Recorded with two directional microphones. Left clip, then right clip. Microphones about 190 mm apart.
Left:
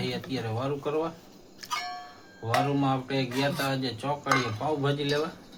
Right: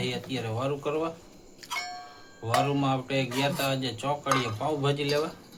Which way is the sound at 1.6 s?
20° left (ahead or behind).